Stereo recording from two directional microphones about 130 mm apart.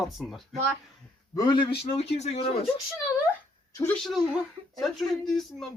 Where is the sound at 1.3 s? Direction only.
35° left (ahead or behind).